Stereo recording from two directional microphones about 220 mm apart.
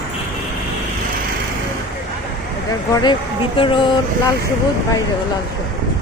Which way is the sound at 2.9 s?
20° left (ahead or behind).